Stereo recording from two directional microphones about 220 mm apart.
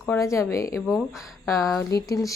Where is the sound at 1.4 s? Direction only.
15° left (ahead or behind).